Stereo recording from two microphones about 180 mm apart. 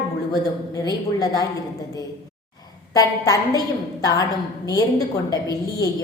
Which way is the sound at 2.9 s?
20° left (ahead or behind).